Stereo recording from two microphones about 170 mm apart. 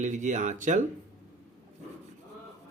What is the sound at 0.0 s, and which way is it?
Speech, 45° right (ahead or behind).